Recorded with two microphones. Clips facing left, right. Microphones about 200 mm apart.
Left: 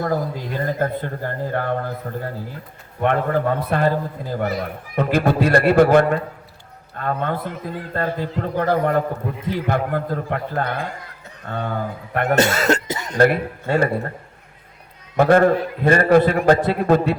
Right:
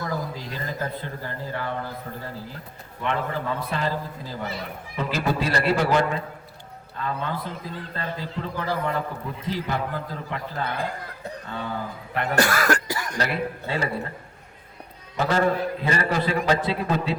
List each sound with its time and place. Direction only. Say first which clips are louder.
0.0 s a man's voice: left 7 dB; 55° left (ahead or behind)
12.4 s cough: left 2 dB; 25° left (ahead or behind)
13.1 s a man's voice: left 12 dB; 50° left (ahead or behind)
15.1 s a man's voice: left 8 dB; 55° left (ahead or behind)